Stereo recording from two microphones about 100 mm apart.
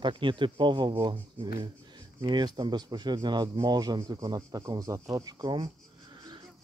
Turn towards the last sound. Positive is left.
turn(degrees=-40)  # may be behind; listen again after turning